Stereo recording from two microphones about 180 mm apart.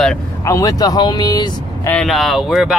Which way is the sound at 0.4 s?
20° left (ahead or behind).